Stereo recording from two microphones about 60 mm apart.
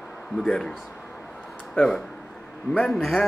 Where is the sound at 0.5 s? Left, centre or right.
Centre.